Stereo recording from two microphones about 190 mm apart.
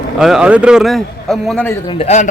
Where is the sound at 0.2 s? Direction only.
5° right (ahead or behind).